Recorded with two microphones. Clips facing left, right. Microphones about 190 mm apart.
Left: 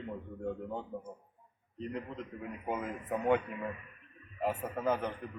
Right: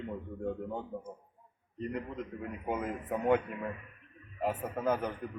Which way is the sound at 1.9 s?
Centre (ahead or behind).